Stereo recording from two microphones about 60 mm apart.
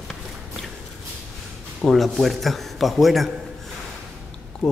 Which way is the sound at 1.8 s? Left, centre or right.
Centre.